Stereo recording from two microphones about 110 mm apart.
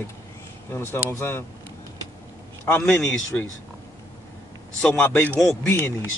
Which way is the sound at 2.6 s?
20° left (ahead or behind).